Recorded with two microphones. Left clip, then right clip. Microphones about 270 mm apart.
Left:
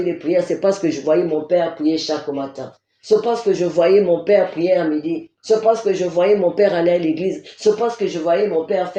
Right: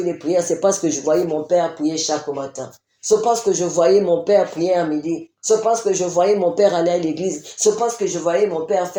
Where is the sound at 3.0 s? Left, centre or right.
Right.